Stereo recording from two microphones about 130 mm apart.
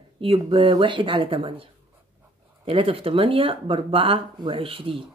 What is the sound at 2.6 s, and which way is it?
Speech, 45° right (ahead or behind).